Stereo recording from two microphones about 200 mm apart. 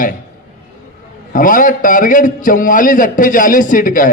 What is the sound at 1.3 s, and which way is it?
A man's voice, 40° left (ahead or behind).